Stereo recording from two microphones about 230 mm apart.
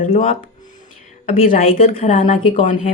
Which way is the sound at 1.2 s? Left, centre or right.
Left.